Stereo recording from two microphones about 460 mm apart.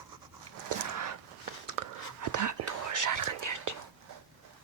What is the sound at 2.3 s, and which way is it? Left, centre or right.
Whispering, right.